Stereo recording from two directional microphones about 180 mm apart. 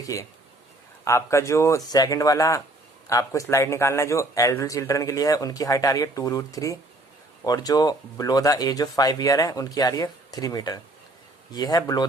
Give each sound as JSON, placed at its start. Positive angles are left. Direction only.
{"t": 0.0, "sound": "speech", "side_deg": 20}